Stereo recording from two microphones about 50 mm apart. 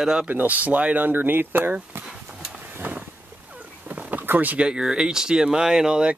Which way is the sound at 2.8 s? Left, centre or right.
Right.